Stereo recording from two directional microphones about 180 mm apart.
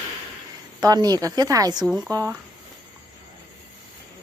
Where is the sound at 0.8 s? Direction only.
20° right (ahead or behind).